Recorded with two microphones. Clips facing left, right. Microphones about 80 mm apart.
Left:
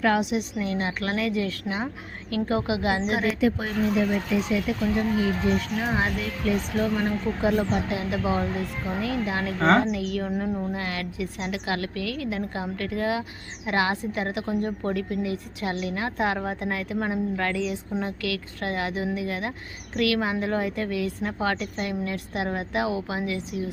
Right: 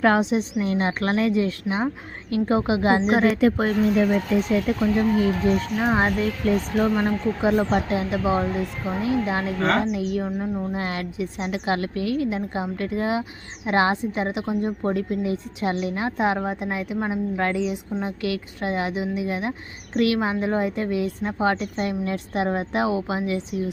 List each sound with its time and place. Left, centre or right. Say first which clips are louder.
0.0 s speech: right 4 dB; right
1.3 s a woman's voice: right 5 dB; right
3.1 s a woman's voice: right 5 dB; right
10.4 s speech: right 1 dB; centre
10.8 s a woman's voice: right 3 dB; right